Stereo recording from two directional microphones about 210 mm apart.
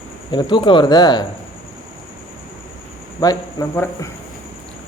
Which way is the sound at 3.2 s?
15° left (ahead or behind).